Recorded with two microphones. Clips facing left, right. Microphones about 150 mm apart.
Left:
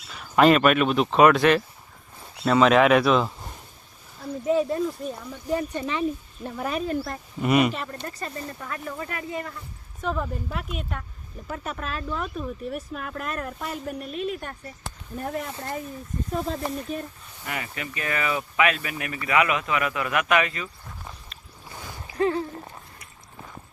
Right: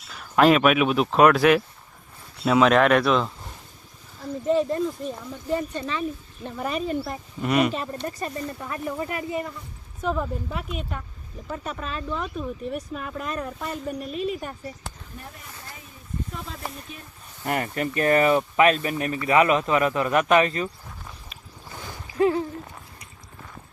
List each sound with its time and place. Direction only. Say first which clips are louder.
0.1 s speech: even; centre (ahead or behind)
5.7 s speech: left 2 dB; 20° left (ahead or behind)
6.4 s speech: even; centre (ahead or behind)
7.7 s speech: right 3 dB; 20° right (ahead or behind); by 14.7 s 5° right (ahead or behind)
15.3 s speech: left 14 dB; 80° left
17.4 s speech: right 7 dB; 45° right (ahead or behind)
22.2 s speech: right 3 dB; 10° right (ahead or behind)